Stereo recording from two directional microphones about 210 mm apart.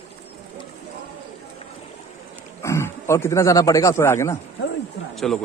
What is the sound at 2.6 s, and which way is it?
Speech, 15° left (ahead or behind).